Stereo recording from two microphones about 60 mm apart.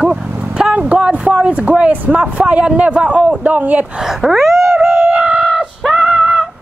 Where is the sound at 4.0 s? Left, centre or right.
Centre.